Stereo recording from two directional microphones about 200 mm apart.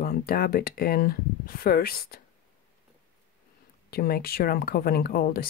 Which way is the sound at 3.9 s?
50° left (ahead or behind).